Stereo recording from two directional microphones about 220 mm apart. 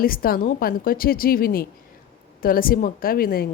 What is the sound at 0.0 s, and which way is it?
Speech, 40° left (ahead or behind).